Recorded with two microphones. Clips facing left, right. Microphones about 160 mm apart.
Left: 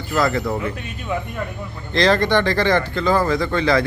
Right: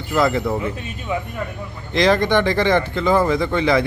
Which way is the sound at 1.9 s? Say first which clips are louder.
Right 1 dB; 15° right (ahead or behind).